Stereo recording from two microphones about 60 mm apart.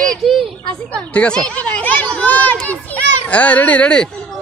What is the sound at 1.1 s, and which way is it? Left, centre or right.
Speech, centre.